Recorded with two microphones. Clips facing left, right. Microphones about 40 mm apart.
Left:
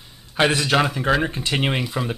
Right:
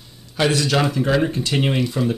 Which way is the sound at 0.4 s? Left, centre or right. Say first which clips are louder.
Even; left.